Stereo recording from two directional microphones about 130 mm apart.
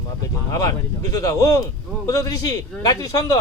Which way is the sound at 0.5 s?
25° left (ahead or behind).